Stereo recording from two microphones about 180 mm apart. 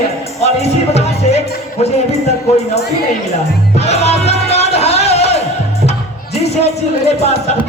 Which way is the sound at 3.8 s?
35° left (ahead or behind).